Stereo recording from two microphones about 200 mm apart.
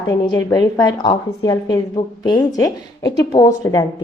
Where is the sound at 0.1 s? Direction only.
20° left (ahead or behind).